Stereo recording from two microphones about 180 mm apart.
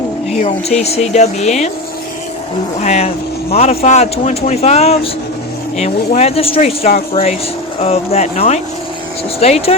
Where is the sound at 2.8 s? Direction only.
40° left (ahead or behind).